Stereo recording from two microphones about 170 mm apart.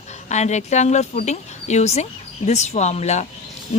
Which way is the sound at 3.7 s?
45° left (ahead or behind).